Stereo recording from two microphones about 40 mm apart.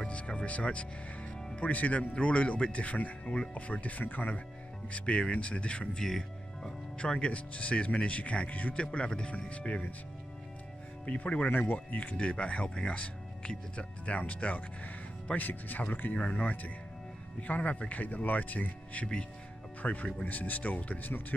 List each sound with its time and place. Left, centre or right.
0.0 s music: left
1.6 s speech: left
4.9 s speech: left
5.9 s music: centre
7.0 s speech: left
11.1 s speech: left
11.5 s speech: left
11.9 s speech: left
15.3 s speech: left